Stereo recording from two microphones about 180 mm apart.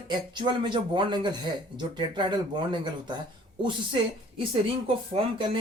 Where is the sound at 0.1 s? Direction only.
25° right (ahead or behind).